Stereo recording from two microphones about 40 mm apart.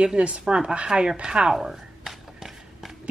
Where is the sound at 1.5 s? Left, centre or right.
Centre.